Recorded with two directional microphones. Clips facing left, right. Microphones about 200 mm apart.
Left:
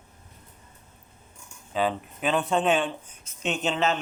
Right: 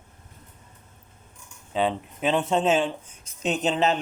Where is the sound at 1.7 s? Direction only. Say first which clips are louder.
Right 1 dB; 25° right (ahead or behind).